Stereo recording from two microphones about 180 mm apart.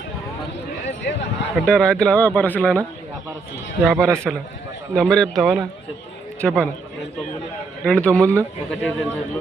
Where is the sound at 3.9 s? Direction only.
15° right (ahead or behind).